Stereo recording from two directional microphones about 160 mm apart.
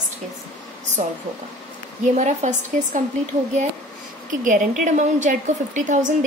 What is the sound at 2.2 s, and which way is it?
Speech, 50° right (ahead or behind).